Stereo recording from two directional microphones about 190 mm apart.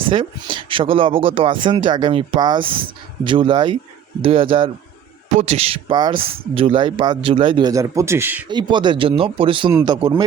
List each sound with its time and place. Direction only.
0.1 s speech: 25° right (ahead or behind)
5.3 s speech: 35° right (ahead or behind); by 8.4 s 10° right (ahead or behind)
8.4 s speech: 25° right (ahead or behind)